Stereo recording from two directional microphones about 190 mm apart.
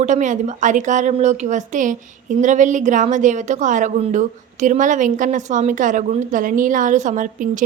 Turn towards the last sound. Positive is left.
turn(degrees=-45)  # may be behind; listen again after turning